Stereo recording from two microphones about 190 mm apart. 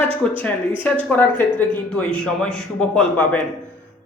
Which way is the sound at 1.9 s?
5° left (ahead or behind).